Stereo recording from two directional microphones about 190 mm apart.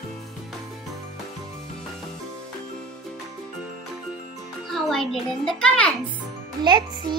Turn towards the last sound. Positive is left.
turn(degrees=-25)  # may be behind; listen again after turning